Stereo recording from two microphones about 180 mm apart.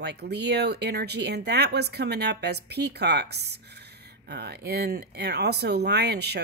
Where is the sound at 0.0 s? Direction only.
65° right (ahead or behind).